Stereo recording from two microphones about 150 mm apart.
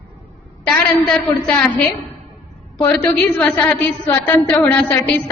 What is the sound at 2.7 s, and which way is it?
A woman's voice, 10° left (ahead or behind).